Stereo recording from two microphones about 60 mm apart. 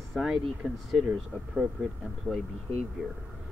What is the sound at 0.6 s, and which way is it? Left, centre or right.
Speech, centre.